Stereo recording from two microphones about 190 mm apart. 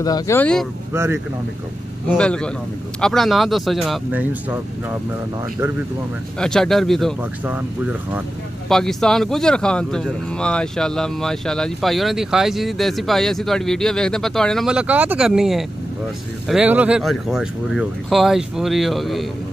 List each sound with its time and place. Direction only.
0.0 s speech: 20° left (ahead or behind)
0.4 s speech: 5° left (ahead or behind)
2.1 s speech: 5° left (ahead or behind)
6.4 s speech: centre (ahead or behind)
8.6 s speech: centre (ahead or behind)